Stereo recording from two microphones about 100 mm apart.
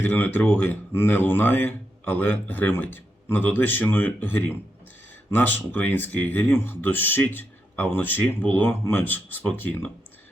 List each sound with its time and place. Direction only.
0.0 s speech: 20° left (ahead or behind)